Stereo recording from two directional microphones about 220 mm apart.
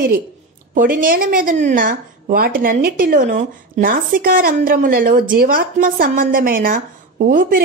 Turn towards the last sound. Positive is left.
turn(degrees=-40)  # may be behind; listen again after turning